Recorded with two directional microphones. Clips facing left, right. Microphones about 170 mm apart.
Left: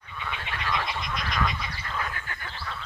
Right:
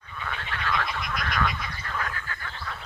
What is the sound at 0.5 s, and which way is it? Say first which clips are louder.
Frog: right 1 dB; 15° left (ahead or behind).